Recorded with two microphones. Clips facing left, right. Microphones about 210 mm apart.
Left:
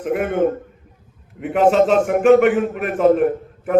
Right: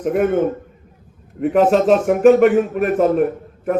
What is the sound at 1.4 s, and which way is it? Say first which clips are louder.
A man's voice: right 1 dB; 40° right (ahead or behind).